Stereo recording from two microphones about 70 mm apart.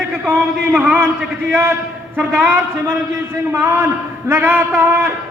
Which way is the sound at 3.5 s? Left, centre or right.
Right.